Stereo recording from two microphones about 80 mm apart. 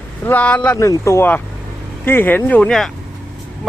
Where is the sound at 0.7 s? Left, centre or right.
Left.